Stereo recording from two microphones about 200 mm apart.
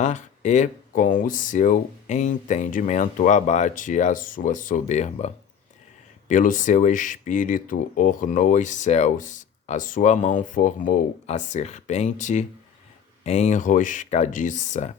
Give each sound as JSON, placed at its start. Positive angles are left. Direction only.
{"t": 0.0, "sound": "speech", "side_deg": 35}